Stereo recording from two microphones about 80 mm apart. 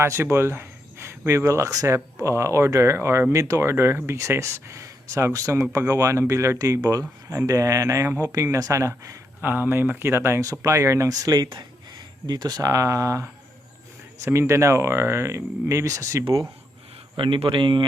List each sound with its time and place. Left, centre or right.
0.0 s speech: right
9.4 s speech: right
10.4 s speech: right
11.5 s a sound: right
12.6 s speech: right
17.2 s speech: right